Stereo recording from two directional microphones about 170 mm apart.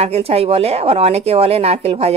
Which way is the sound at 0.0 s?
35° right (ahead or behind).